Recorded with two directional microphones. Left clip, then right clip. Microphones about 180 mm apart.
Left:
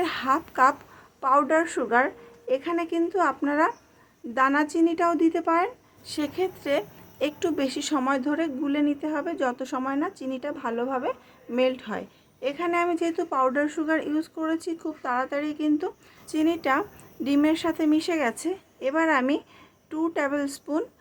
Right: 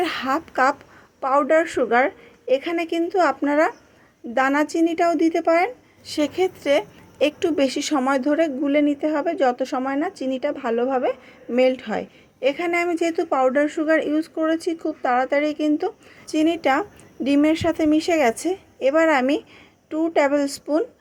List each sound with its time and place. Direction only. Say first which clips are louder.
0.0 s a woman's voice: right 2 dB; 15° right (ahead or behind)